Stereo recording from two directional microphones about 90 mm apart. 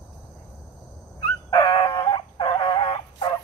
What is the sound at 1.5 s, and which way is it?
Dog, 45° left (ahead or behind).